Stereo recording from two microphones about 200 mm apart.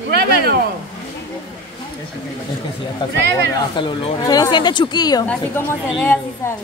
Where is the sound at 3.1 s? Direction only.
60° right (ahead or behind).